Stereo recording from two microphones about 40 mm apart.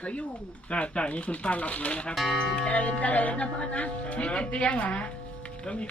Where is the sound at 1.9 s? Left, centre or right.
Left.